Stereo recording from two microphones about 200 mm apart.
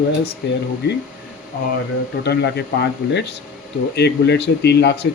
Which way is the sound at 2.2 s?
60° left (ahead or behind).